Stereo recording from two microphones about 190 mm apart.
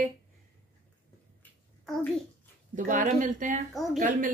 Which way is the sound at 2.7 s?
40° right (ahead or behind).